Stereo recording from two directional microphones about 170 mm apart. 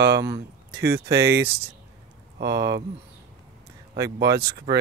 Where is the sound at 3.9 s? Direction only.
80° right.